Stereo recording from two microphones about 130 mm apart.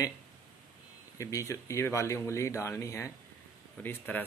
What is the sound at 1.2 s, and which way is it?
Speech, 25° left (ahead or behind).